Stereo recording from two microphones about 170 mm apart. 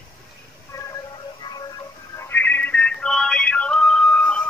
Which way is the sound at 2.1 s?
15° left (ahead or behind).